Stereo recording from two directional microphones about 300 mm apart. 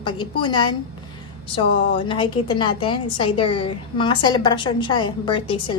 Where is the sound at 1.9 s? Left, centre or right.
Centre.